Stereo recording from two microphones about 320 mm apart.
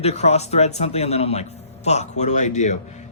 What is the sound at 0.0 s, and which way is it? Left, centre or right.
Speech, centre.